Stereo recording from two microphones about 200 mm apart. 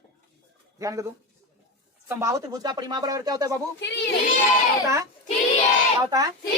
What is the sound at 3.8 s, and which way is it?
Speech, 60° left (ahead or behind).